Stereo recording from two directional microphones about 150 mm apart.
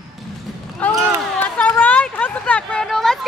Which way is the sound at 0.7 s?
10° left (ahead or behind).